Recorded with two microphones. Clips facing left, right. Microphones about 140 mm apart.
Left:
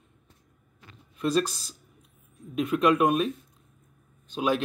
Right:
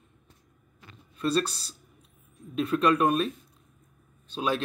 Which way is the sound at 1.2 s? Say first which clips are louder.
Left 1 dB; 15° left (ahead or behind).